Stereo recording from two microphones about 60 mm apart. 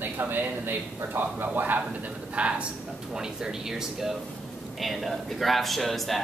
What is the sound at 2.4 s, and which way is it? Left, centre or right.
A man's voice, centre.